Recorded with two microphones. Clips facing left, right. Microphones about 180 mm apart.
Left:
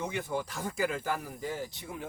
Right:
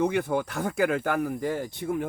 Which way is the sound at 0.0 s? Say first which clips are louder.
Right 9 dB; 60° right (ahead or behind).